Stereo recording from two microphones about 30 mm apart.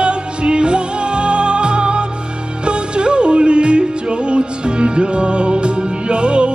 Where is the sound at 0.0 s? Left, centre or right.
Right.